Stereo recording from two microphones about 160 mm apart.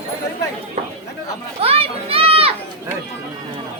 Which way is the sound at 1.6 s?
35° right (ahead or behind).